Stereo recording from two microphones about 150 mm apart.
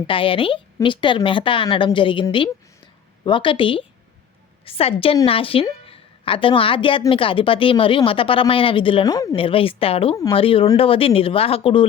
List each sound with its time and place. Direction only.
0.1 s a woman's voice: 35° left (ahead or behind)
3.2 s a woman's voice: 35° left (ahead or behind)